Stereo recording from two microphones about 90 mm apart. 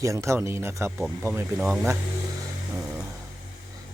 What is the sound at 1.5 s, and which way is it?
Speech, 15° right (ahead or behind).